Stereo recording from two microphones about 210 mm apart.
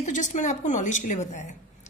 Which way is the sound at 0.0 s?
35° left (ahead or behind).